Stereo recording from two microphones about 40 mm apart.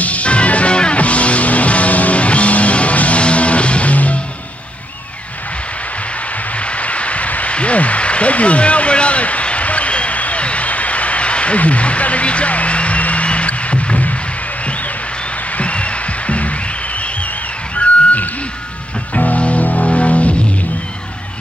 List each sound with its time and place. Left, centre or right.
0.0 s music: left
6.5 s a sound: left
14.6 s music: left